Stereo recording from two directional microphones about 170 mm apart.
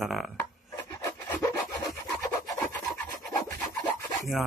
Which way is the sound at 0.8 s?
15° left (ahead or behind).